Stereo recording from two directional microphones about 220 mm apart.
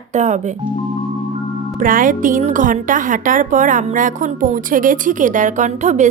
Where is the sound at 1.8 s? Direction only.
40° right (ahead or behind).